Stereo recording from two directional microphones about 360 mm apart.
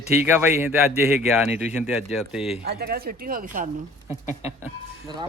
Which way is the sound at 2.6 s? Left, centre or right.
Right.